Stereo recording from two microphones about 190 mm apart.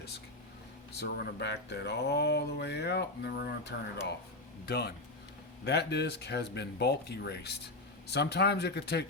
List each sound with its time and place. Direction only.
0.9 s speech: 60° left (ahead or behind)